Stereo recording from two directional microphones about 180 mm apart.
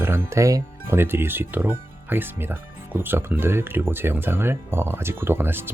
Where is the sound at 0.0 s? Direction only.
10° right (ahead or behind).